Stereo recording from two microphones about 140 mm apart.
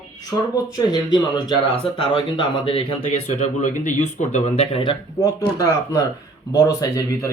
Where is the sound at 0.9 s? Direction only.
30° left (ahead or behind); by 4.8 s 45° left (ahead or behind).